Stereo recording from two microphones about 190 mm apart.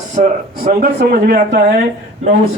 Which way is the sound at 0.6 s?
55° right (ahead or behind).